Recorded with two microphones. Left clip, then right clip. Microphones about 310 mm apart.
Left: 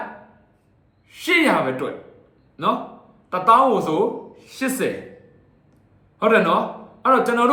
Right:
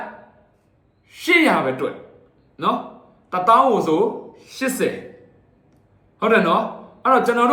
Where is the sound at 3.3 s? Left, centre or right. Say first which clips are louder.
Even; centre.